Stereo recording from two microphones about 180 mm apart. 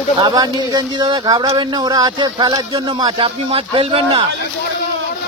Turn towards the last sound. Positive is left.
turn(degrees=-30)  # may be behind; listen again after turning